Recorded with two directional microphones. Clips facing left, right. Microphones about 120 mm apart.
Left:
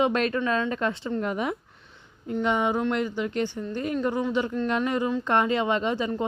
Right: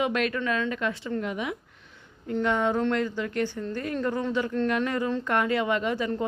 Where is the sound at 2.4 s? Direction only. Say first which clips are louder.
Even; 15° left (ahead or behind).